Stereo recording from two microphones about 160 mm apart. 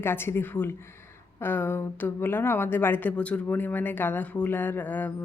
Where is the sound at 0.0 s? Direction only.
15° left (ahead or behind).